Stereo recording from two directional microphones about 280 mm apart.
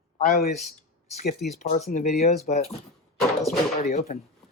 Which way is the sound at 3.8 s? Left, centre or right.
Left.